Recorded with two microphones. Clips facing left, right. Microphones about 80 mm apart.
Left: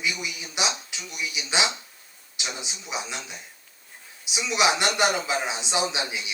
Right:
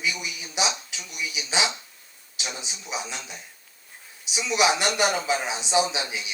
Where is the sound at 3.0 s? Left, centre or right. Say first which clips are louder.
Left 1 dB; centre.